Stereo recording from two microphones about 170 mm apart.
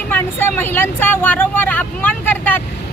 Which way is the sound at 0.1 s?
10° left (ahead or behind).